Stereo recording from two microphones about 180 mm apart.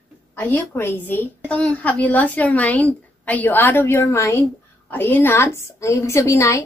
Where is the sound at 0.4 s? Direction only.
10° left (ahead or behind).